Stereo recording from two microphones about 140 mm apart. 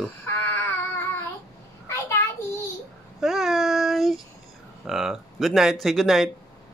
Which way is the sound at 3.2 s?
5° right (ahead or behind).